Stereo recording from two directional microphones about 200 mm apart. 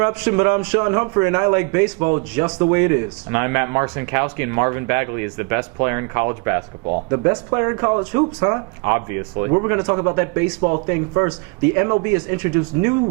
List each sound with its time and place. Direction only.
0.0 s speech: 15° right (ahead or behind)